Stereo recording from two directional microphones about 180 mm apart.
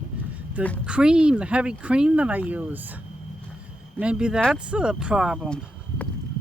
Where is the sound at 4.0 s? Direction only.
5° right (ahead or behind).